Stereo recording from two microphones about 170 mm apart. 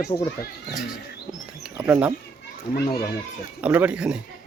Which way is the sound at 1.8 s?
5° right (ahead or behind).